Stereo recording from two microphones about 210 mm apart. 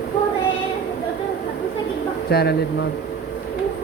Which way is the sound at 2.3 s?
50° left (ahead or behind).